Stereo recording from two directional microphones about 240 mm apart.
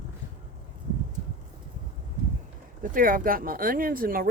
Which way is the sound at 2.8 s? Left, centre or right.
Right.